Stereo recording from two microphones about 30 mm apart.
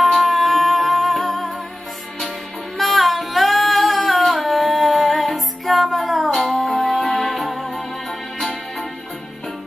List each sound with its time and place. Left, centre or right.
0.0 s music: centre
2.8 s singing: centre
6.6 s music: centre